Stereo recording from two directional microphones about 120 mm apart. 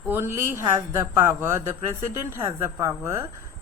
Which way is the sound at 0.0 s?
20° right (ahead or behind).